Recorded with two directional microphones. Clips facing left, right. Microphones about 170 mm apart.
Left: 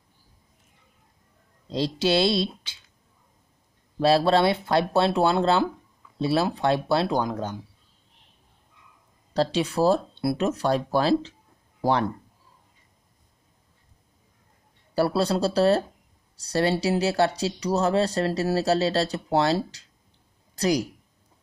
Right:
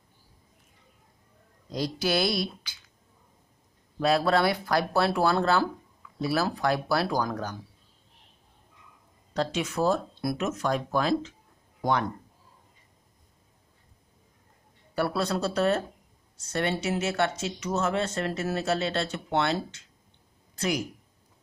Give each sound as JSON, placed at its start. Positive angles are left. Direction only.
{"t": 1.7, "sound": "speech", "side_deg": 25}
{"t": 4.0, "sound": "speech", "side_deg": 30}
{"t": 9.3, "sound": "speech", "side_deg": 35}
{"t": 15.0, "sound": "speech", "side_deg": 30}